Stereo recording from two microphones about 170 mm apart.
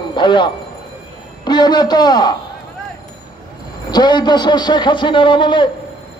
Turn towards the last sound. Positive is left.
turn(degrees=30)  # may be behind; listen again after turning